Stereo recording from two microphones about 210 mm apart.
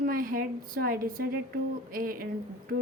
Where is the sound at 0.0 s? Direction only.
45° right (ahead or behind).